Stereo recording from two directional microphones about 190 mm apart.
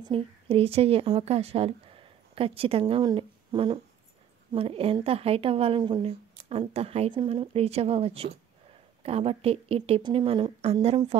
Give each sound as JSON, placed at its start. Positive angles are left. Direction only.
{"t": 0.0, "sound": "a woman's voice", "side_deg": -30}